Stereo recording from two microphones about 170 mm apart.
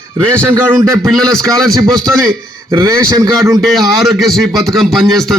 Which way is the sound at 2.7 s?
20° right (ahead or behind).